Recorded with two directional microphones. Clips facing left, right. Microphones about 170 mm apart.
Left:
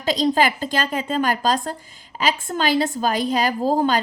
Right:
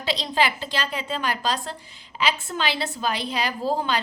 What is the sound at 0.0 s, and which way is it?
A woman's voice, 45° left (ahead or behind).